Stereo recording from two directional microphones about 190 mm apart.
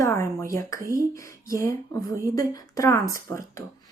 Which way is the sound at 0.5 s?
15° left (ahead or behind).